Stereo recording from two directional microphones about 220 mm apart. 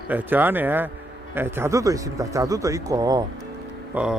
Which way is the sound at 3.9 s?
5° right (ahead or behind).